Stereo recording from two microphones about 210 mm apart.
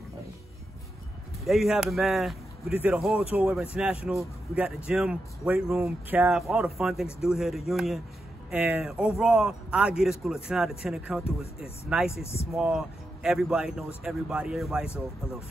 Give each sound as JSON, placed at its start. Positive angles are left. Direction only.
{"t": 1.4, "sound": "speech", "side_deg": 0}
{"t": 11.2, "sound": "speech", "side_deg": 30}
{"t": 12.5, "sound": "speech", "side_deg": -5}